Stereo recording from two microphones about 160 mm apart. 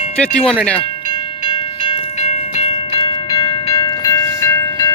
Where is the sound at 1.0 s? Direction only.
25° left (ahead or behind).